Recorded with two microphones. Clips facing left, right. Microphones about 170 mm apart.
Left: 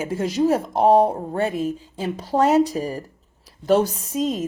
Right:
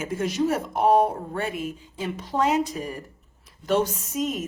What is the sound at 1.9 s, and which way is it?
A woman's voice, 35° left (ahead or behind).